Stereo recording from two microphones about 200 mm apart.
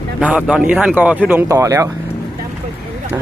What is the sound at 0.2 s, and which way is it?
Speech, 5° right (ahead or behind).